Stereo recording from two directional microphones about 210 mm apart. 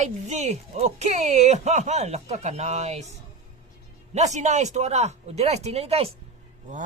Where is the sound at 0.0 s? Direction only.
35° right (ahead or behind).